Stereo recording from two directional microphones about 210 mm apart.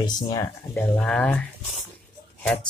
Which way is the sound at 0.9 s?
5° left (ahead or behind).